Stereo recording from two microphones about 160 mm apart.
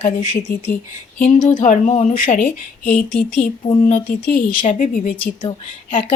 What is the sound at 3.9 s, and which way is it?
Speech, 60° left (ahead or behind).